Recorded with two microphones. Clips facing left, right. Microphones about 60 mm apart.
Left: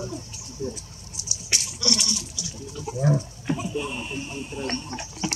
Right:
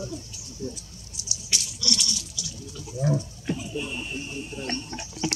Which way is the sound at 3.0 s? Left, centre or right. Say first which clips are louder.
Left 2 dB; left.